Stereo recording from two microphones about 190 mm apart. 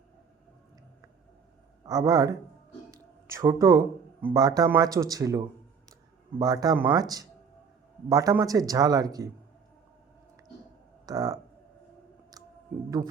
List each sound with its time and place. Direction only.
1.8 s a man's voice: 20° right (ahead or behind)
11.0 s speech: 20° right (ahead or behind)